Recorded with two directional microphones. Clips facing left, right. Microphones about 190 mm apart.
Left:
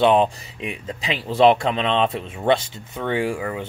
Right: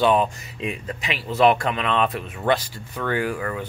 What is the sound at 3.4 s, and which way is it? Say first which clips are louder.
Speech: left 1 dB; 15° left (ahead or behind).